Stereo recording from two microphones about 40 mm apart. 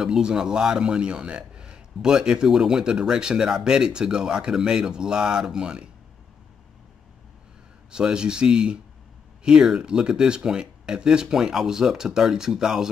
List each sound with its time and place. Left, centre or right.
0.0 s speech: centre
7.9 s speech: right